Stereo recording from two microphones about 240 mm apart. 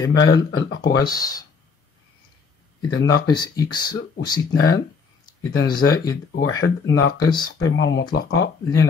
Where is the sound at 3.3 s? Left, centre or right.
Centre.